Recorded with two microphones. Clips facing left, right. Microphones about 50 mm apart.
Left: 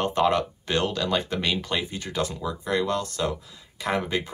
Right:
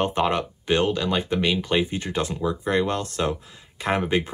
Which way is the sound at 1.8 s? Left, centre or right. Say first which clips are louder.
Right 4 dB; right.